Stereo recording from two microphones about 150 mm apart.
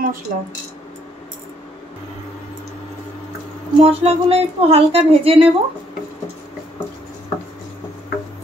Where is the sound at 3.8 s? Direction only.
40° right (ahead or behind).